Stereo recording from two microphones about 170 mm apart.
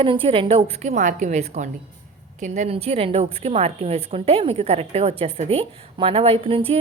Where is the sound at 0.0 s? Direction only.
30° right (ahead or behind).